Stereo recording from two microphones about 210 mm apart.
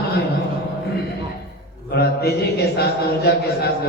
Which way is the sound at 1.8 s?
50° left (ahead or behind).